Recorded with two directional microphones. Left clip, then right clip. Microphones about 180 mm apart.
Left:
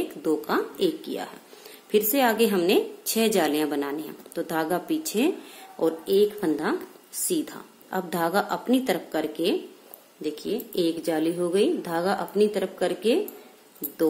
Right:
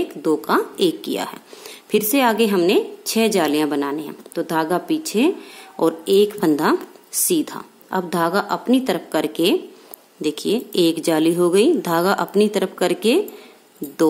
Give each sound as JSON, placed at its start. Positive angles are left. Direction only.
{"t": 0.2, "sound": "a woman's voice", "side_deg": -25}
{"t": 5.8, "sound": "a woman's voice", "side_deg": -30}